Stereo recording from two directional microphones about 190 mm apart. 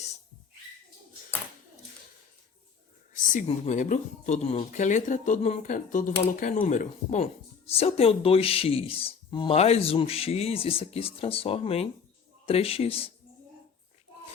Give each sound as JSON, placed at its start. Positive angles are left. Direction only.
{"t": 3.3, "sound": "speech", "side_deg": 40}